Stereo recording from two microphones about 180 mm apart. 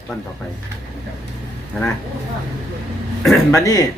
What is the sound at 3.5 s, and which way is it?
Speech, 20° left (ahead or behind).